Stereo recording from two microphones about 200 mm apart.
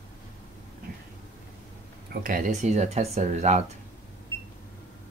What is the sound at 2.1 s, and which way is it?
Speech, 45° right (ahead or behind).